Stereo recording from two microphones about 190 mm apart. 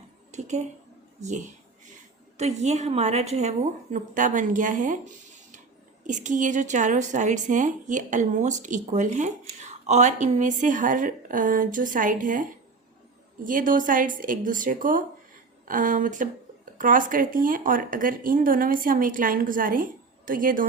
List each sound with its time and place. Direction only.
0.3 s a woman's voice: 35° right (ahead or behind)
6.1 s speech: 40° right (ahead or behind)